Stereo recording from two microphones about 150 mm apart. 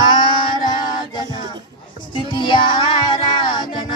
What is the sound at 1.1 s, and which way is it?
Music, 30° left (ahead or behind).